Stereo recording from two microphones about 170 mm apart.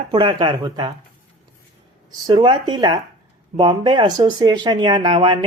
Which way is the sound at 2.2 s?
30° right (ahead or behind).